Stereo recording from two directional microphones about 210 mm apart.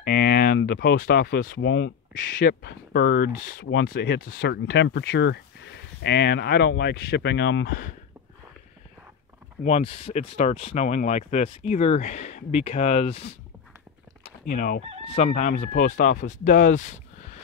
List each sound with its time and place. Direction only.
0.0 s speech: 45° left (ahead or behind)
9.6 s speech: 30° left (ahead or behind)
14.4 s speech: 45° left (ahead or behind)
15.0 s speech: 30° left (ahead or behind)